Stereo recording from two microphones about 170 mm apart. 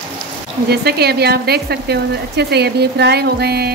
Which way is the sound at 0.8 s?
70° right (ahead or behind).